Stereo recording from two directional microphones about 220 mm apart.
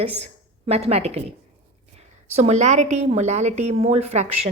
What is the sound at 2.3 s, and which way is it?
A woman's voice, 30° right (ahead or behind).